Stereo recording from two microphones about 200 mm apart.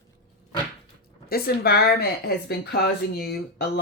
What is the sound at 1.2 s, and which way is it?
Speech, 50° left (ahead or behind).